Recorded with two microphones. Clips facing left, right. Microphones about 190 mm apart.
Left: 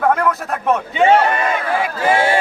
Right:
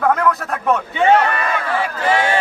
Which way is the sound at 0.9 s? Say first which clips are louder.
Left 2 dB; 15° left (ahead or behind).